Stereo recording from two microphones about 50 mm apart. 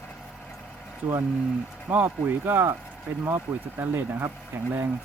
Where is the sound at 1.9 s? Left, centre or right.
Right.